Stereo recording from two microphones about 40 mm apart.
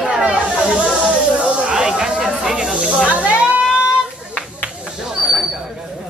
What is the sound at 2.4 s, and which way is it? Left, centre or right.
Snake, centre.